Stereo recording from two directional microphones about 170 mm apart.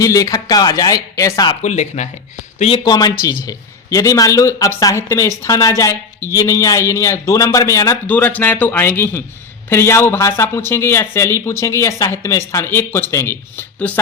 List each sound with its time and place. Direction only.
0.0 s speech: 20° left (ahead or behind)
1.6 s speech: 45° left (ahead or behind)
2.6 s a man's voice: 35° left (ahead or behind); by 14.0 s 10° left (ahead or behind)